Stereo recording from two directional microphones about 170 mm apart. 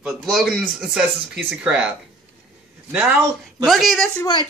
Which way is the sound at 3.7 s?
Centre (ahead or behind).